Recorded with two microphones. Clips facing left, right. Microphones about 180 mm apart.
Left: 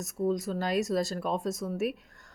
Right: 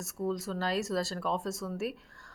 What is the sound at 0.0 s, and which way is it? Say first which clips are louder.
Speech: left 4 dB; 15° left (ahead or behind).